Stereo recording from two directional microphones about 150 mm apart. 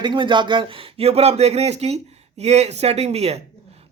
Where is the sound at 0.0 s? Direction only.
30° right (ahead or behind).